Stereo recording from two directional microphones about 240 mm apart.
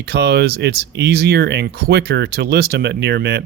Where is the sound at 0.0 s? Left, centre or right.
Right.